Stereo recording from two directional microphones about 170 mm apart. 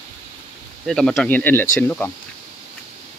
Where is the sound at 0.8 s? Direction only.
Centre (ahead or behind).